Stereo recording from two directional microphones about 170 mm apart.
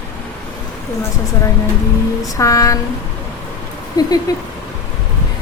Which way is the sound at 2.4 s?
20° left (ahead or behind).